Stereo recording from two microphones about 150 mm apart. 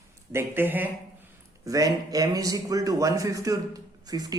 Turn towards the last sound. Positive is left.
turn(degrees=-25)  # may be behind; listen again after turning